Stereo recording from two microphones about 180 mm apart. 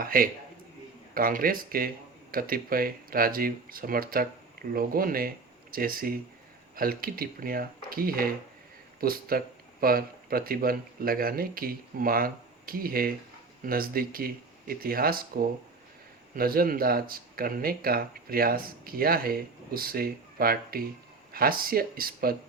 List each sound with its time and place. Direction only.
0.0 s a man's voice: 50° right (ahead or behind)